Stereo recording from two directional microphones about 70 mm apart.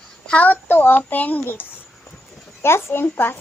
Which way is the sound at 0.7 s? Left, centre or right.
Left.